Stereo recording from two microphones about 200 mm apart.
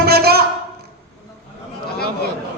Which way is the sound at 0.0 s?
50° right (ahead or behind).